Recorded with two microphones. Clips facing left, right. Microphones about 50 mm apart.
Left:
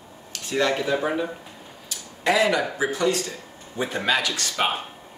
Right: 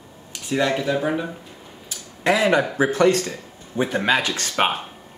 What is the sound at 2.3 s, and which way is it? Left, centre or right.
Speech, right.